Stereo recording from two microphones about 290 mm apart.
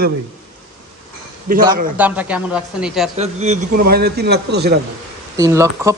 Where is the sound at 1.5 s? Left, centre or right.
Right.